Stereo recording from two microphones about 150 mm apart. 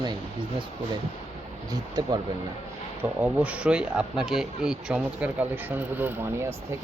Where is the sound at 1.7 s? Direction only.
25° right (ahead or behind).